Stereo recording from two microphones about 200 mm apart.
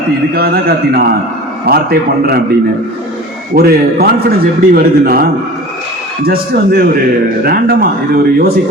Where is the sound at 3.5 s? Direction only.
50° right (ahead or behind).